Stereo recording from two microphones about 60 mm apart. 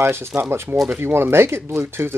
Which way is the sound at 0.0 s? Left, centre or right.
Right.